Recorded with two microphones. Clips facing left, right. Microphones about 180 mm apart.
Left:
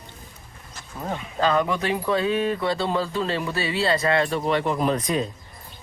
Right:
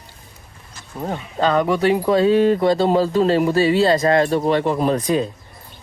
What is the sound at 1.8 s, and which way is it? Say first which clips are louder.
Speech: right 8 dB; 35° right (ahead or behind).